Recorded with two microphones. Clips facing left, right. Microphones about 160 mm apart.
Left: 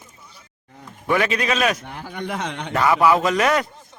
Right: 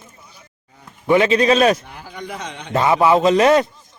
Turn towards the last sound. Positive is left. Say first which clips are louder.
# right 6 dB
turn(degrees=-25)  # may be behind; listen again after turning